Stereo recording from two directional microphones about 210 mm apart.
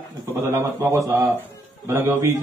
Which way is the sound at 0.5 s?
10° right (ahead or behind).